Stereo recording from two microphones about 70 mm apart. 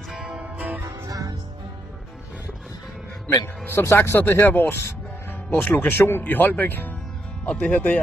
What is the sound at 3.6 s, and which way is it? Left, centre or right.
Speech, left.